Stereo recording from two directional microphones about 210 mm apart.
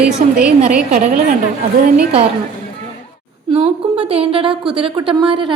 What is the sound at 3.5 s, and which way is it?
A woman's voice, 30° right (ahead or behind).